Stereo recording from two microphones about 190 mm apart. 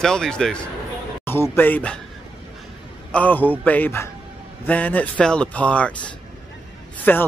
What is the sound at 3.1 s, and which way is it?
Speech, 10° left (ahead or behind).